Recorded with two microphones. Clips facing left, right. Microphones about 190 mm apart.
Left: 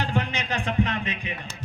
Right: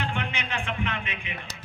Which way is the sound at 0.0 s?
40° left (ahead or behind).